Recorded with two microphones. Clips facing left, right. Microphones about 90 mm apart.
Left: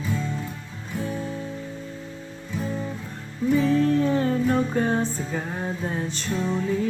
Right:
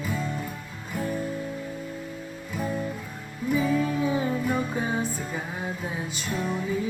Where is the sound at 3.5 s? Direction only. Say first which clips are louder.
Left 4 dB; 10° right (ahead or behind).